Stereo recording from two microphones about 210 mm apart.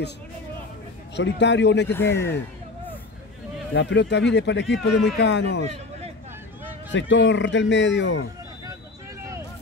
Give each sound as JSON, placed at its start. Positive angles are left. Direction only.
{"t": 1.1, "sound": "speech", "side_deg": 55}
{"t": 1.9, "sound": "speech", "side_deg": 10}
{"t": 3.7, "sound": "speech", "side_deg": 55}
{"t": 5.7, "sound": "a sound", "side_deg": -30}
{"t": 6.9, "sound": "speech", "side_deg": 60}